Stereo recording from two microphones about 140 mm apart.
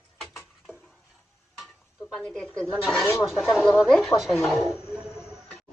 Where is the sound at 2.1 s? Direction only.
5° left (ahead or behind).